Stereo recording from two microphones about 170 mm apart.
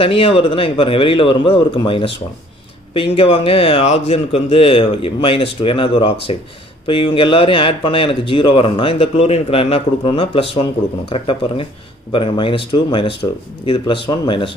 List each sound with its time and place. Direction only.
0.0 s speech: 30° left (ahead or behind)